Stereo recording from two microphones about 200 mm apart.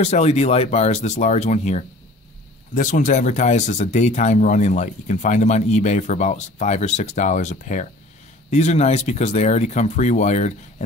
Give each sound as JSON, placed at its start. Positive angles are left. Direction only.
{"t": 0.0, "sound": "speech", "side_deg": 30}